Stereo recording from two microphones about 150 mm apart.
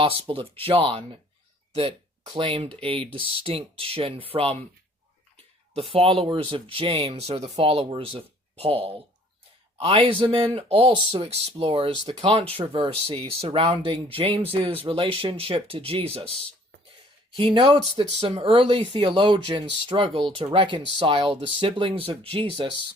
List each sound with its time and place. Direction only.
0.0 s speech: 35° right (ahead or behind)
1.7 s speech: 40° right (ahead or behind)
5.7 s speech: 40° right (ahead or behind)
17.3 s speech: 35° right (ahead or behind)